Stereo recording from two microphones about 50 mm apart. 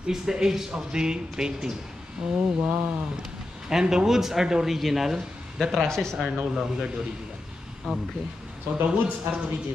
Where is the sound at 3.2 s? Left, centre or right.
Centre.